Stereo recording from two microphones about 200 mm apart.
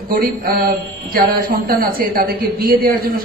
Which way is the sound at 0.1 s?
45° right (ahead or behind).